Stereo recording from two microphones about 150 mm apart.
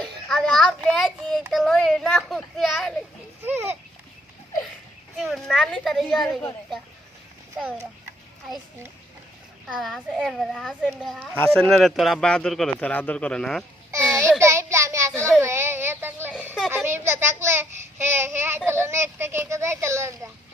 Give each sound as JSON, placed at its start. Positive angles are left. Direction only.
{"t": 0.0, "sound": "child singing", "side_deg": 5}
{"t": 1.5, "sound": "a child's voice", "side_deg": 0}
{"t": 3.4, "sound": "a child's voice", "side_deg": -15}
{"t": 5.1, "sound": "a child's voice", "side_deg": 0}
{"t": 9.6, "sound": "a child's voice", "side_deg": 0}
{"t": 14.3, "sound": "child singing", "side_deg": -20}
{"t": 15.4, "sound": "a sound", "side_deg": -15}
{"t": 16.6, "sound": "a sound", "side_deg": 0}
{"t": 16.8, "sound": "a child's voice", "side_deg": -15}